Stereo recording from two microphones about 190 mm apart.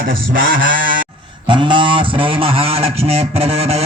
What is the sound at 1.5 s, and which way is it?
Speech, 25° right (ahead or behind).